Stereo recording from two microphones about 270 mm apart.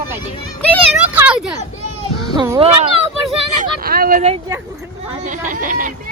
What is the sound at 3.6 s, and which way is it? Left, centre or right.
Speech, right.